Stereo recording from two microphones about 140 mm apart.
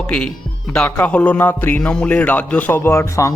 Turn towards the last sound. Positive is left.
turn(degrees=20)  # may be behind; listen again after turning